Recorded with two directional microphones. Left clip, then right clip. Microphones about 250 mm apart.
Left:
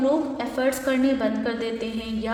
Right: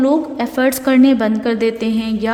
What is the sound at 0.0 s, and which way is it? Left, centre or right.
A woman's voice, right.